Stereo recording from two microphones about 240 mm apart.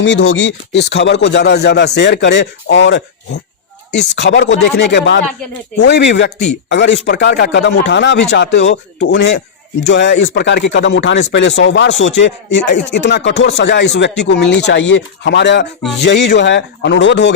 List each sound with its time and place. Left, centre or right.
0.0 s speech: left